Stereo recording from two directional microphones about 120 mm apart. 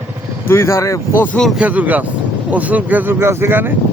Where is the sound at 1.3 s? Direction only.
5° left (ahead or behind).